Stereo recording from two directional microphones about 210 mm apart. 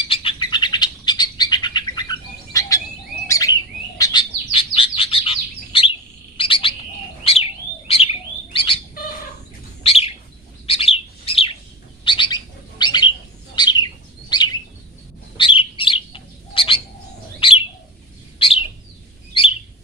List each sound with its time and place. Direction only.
0.1 s bird: 25° left (ahead or behind)
9.8 s bird: 30° left (ahead or behind)
14.3 s chirp: 20° left (ahead or behind)
15.4 s bird: 25° left (ahead or behind)
19.3 s chirp: 25° left (ahead or behind)